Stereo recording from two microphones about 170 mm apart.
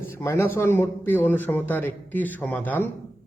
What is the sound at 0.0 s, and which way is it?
Speech, 15° left (ahead or behind).